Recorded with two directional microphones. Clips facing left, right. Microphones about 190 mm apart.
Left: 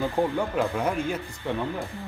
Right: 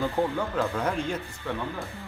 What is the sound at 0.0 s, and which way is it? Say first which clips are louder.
Speech: left 2 dB; 20° left (ahead or behind).